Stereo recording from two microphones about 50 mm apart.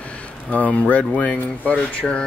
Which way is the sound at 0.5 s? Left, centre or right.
Left.